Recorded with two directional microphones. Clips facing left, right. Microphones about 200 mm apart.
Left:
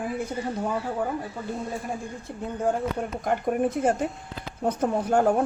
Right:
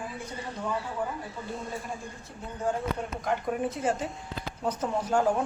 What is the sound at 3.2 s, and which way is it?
A man's voice, 50° left (ahead or behind).